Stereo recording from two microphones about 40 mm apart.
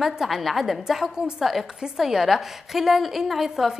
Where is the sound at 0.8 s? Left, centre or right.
Centre.